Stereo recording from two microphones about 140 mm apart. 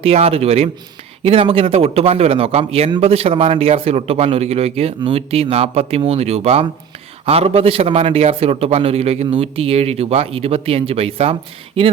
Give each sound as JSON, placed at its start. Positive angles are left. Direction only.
{"t": 0.0, "sound": "a man's voice", "side_deg": -45}